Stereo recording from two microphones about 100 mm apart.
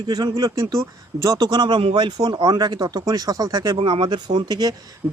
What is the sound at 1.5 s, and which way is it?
Speech, 50° right (ahead or behind).